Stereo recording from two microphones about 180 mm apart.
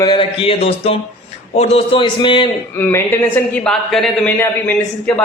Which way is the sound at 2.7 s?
15° left (ahead or behind).